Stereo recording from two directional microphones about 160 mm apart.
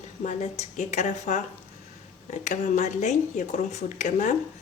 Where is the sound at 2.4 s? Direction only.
50° left (ahead or behind).